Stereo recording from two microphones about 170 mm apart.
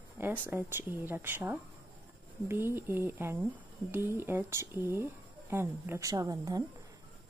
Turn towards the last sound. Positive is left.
turn(degrees=-20)  # may be behind; listen again after turning